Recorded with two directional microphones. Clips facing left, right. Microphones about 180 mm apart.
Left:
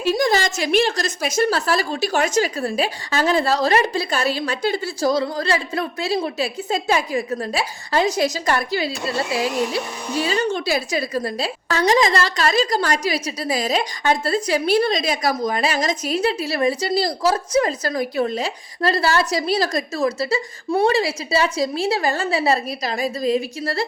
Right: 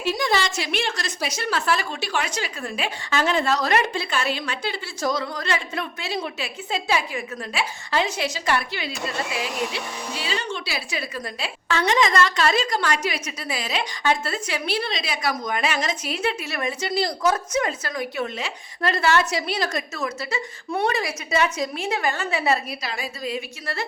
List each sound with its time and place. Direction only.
0.0 s a woman's voice: 45° left (ahead or behind)